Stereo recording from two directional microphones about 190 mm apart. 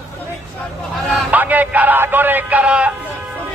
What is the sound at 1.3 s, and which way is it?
Speech, 10° right (ahead or behind).